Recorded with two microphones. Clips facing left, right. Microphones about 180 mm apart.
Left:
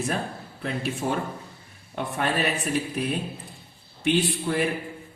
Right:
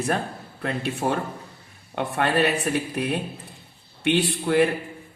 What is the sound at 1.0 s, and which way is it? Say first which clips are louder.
Speech: right 2 dB; 60° right (ahead or behind).